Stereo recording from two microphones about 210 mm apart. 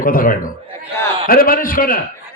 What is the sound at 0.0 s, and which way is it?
A man's voice, 40° left (ahead or behind).